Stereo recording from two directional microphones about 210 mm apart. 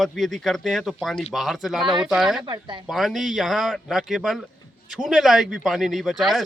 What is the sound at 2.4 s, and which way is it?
Speech, 20° right (ahead or behind).